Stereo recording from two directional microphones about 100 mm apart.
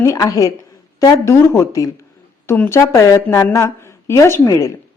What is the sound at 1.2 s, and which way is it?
Speech, 25° left (ahead or behind).